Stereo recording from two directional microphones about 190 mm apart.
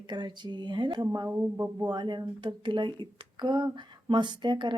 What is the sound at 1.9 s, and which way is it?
Speech, 25° right (ahead or behind).